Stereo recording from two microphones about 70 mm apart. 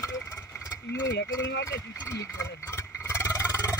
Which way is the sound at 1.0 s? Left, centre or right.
Left.